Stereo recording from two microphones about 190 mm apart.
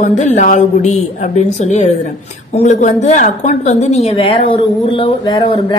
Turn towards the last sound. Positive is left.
turn(degrees=25)  # may be behind; listen again after turning